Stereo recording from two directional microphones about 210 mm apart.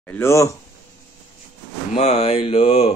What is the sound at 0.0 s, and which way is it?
Speech, 10° left (ahead or behind).